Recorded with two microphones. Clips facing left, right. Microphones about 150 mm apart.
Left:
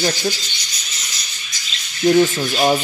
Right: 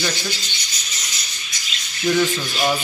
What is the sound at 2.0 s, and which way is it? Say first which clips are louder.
Speech: left 5 dB; 40° left (ahead or behind).